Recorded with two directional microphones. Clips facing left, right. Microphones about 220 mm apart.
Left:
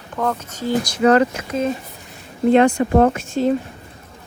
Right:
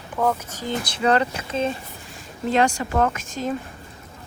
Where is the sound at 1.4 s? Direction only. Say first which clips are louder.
Left 3 dB; 30° right (ahead or behind).